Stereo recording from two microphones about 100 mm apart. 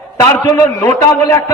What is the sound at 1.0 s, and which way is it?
Speech, 35° left (ahead or behind).